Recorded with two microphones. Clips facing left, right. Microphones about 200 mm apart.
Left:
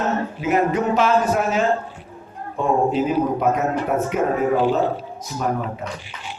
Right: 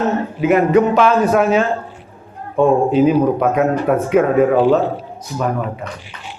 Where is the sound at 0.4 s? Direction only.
65° right (ahead or behind); by 1.6 s 90° right.